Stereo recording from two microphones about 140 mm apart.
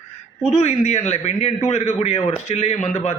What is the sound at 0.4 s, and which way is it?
A man's voice, 50° left (ahead or behind).